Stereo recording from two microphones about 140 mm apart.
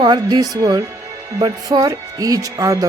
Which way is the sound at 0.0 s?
30° right (ahead or behind).